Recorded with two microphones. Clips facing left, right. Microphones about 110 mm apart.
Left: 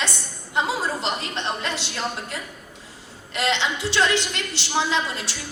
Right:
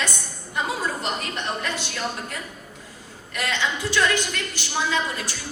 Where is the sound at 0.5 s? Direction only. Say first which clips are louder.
Left 2 dB; 25° left (ahead or behind).